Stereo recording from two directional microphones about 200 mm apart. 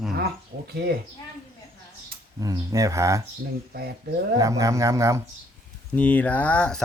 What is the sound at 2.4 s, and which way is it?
Speech, 15° right (ahead or behind).